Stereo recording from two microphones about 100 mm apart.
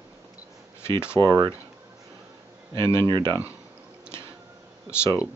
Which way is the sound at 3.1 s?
45° right (ahead or behind).